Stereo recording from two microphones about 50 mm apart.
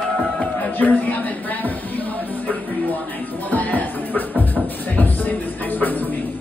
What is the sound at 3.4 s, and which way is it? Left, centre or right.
Music, left.